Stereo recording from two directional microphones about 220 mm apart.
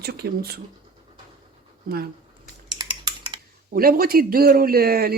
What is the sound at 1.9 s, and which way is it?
Speech, 40° right (ahead or behind).